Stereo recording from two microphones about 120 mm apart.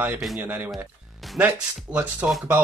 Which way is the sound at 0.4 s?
15° right (ahead or behind).